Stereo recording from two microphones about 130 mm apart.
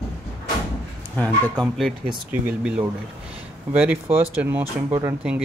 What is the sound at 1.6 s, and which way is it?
Speech, centre (ahead or behind).